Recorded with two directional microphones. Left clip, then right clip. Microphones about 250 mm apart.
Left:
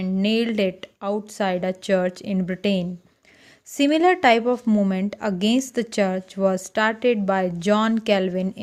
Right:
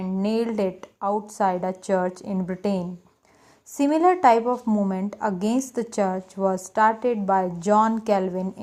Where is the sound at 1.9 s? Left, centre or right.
Left.